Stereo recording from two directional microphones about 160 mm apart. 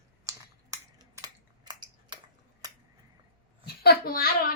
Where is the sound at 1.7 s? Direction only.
30° right (ahead or behind).